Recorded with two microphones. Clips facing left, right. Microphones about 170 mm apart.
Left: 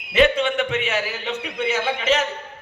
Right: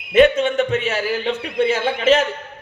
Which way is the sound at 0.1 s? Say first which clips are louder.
Right 4 dB; 45° right (ahead or behind).